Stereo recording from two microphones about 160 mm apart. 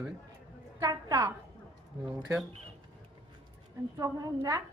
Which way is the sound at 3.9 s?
20° right (ahead or behind).